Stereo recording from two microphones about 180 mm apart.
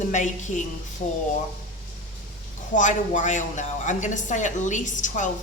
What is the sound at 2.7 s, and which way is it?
Speech, 45° left (ahead or behind).